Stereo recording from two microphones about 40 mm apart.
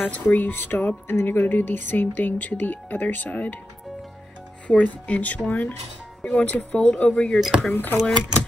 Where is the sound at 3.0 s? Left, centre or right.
Left.